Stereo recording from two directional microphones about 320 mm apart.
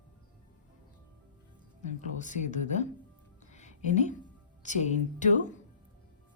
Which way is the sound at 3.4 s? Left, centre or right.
Left.